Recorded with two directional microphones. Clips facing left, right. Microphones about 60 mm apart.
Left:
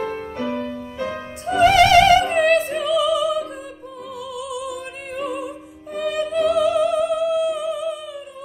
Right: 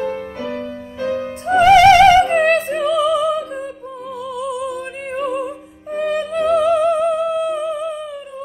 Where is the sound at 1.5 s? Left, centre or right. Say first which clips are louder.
Right 5 dB; right.